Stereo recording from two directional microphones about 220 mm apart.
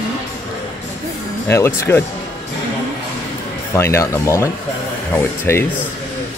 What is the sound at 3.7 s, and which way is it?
Speech, 10° left (ahead or behind).